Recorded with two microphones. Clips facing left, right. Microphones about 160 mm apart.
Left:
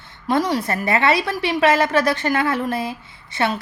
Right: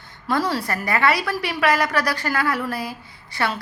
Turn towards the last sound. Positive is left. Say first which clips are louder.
# left 3 dB
turn(degrees=20)  # may be behind; listen again after turning